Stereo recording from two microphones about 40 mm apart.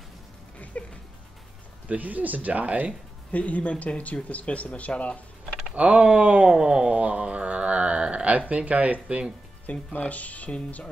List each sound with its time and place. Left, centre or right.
0.7 s speech: left
1.9 s speech: right
3.3 s speech: left
5.8 s speech: right
7.0 s speech: right
9.0 s speech: right
9.7 s speech: left